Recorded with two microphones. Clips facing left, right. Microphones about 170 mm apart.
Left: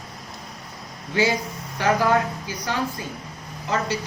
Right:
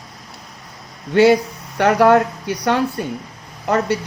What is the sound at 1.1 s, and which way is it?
A woman's voice, 65° right (ahead or behind).